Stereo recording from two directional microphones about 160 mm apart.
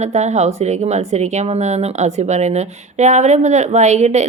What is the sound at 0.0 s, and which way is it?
Speech, 45° right (ahead or behind).